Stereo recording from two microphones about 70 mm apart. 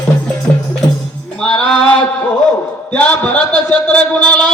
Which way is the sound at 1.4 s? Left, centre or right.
Centre.